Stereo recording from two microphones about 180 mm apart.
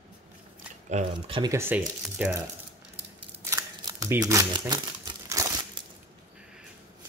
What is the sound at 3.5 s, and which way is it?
Shuffling cards, 20° right (ahead or behind).